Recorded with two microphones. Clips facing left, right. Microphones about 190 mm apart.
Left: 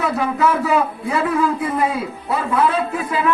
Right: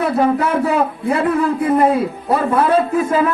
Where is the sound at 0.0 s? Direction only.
55° right (ahead or behind).